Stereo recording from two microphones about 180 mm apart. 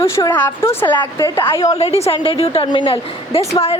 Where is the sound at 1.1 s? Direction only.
20° left (ahead or behind).